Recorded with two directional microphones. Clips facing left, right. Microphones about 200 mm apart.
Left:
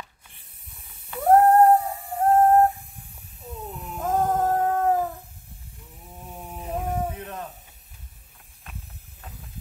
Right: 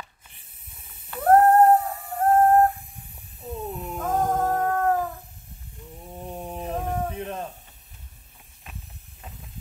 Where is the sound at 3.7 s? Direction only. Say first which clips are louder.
Right 4 dB; 20° right (ahead or behind).